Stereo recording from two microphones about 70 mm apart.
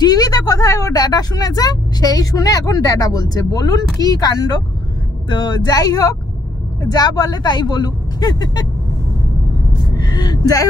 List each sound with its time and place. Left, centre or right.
0.0 s speech: left
9.9 s speech: left